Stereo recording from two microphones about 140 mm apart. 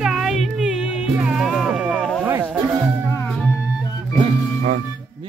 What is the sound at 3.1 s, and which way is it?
Music, 20° left (ahead or behind).